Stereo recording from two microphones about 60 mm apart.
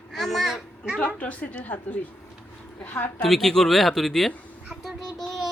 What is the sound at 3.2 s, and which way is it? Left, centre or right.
A woman's voice, centre.